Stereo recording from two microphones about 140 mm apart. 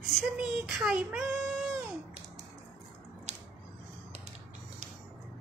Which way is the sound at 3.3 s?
55° right (ahead or behind).